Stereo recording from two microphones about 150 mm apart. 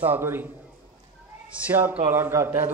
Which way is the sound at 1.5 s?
10° right (ahead or behind).